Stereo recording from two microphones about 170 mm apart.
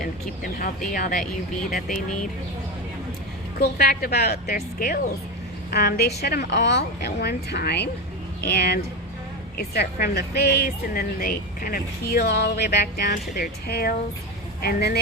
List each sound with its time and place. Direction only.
0.9 s speech: 50° left (ahead or behind)
3.6 s a woman's voice: 65° left (ahead or behind)
4.5 s speech: 50° left (ahead or behind)
5.7 s a woman's voice: 70° left (ahead or behind)
6.2 s a woman's voice: 80° left